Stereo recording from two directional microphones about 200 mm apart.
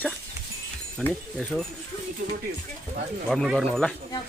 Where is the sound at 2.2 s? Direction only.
45° right (ahead or behind).